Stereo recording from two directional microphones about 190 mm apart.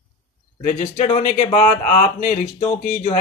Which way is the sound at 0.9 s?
35° left (ahead or behind).